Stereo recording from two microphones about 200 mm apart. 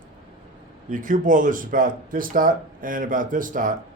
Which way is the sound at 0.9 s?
40° right (ahead or behind).